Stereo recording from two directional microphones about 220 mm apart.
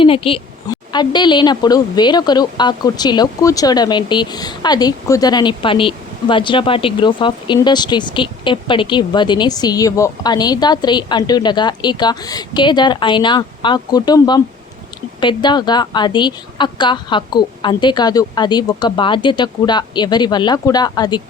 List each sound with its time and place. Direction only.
0.0 s a woman's voice: 25° left (ahead or behind)